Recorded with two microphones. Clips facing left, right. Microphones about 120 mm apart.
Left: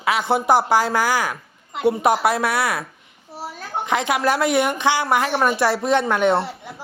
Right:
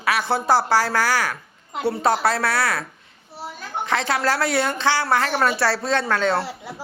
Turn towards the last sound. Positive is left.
turn(degrees=20)  # may be behind; listen again after turning